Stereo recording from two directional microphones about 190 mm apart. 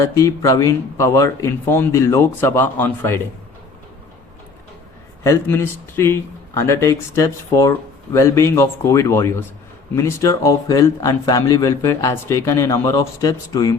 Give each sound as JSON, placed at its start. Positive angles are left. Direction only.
{"t": 0.0, "sound": "a man's voice", "side_deg": 15}
{"t": 5.2, "sound": "a man's voice", "side_deg": 15}